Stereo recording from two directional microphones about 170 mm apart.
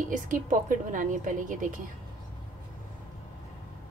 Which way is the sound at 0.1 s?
50° right (ahead or behind).